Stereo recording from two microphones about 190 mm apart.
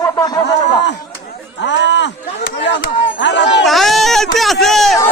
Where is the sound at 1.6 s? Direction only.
70° left (ahead or behind).